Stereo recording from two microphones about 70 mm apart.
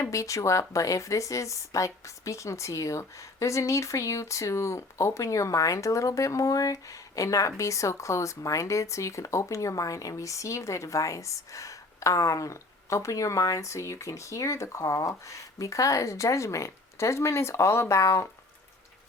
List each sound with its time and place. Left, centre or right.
0.0 s a woman's voice: left